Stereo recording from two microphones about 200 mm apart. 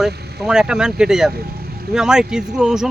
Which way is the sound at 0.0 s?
Centre (ahead or behind).